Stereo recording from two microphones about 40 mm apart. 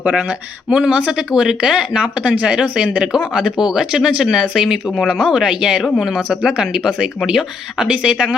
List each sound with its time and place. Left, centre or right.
0.0 s speech: right
0.7 s speech: right
5.8 s speech: centre